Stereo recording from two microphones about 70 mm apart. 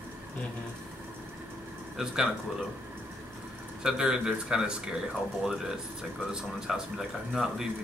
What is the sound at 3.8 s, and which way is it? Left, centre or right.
Speech, centre.